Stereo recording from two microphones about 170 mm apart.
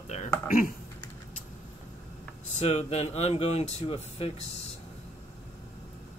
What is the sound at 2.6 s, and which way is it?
Speech, 40° left (ahead or behind).